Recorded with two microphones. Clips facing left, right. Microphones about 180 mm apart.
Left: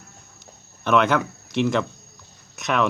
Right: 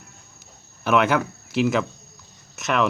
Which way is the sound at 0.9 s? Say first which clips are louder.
Even; 5° right (ahead or behind).